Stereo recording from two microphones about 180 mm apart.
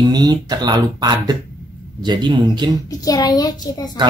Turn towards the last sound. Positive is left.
turn(degrees=20)  # may be behind; listen again after turning